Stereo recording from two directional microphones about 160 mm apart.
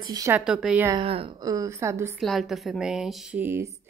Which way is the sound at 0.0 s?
25° right (ahead or behind).